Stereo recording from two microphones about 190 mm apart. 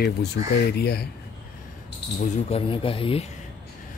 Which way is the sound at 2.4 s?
30° left (ahead or behind).